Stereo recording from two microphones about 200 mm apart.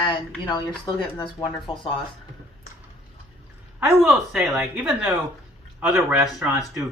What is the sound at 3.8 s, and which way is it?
A woman's voice, 5° right (ahead or behind).